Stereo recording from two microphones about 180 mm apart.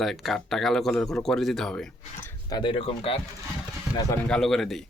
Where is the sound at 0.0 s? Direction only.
Centre (ahead or behind).